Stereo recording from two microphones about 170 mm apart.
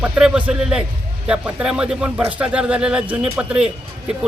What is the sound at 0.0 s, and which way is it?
A man's voice, 5° right (ahead or behind).